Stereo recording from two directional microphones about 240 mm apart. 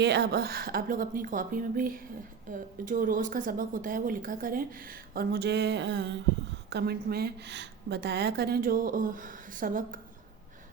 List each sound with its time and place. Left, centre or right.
0.0 s a woman's voice: right